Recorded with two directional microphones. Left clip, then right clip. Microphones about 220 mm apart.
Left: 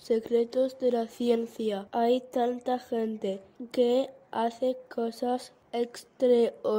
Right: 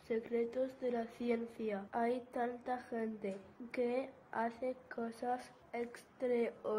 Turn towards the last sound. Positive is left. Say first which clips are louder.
# left 13 dB
turn(degrees=55)  # may be behind; listen again after turning